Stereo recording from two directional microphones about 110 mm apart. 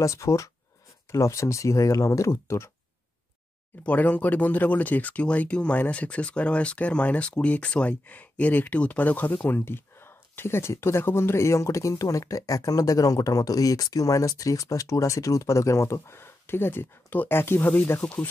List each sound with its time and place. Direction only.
0.0 s speech: 30° left (ahead or behind)
3.8 s speech: 15° left (ahead or behind)